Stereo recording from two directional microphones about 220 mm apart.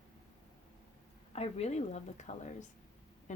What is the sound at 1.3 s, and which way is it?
A woman's voice, 30° left (ahead or behind).